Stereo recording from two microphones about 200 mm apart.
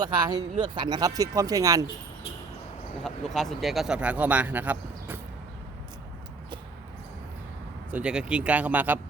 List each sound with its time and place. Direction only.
0.0 s speech: 20° right (ahead or behind)
3.0 s speech: centre (ahead or behind)
7.9 s speech: 5° right (ahead or behind)